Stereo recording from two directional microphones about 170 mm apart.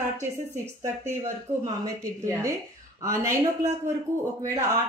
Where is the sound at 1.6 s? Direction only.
20° right (ahead or behind).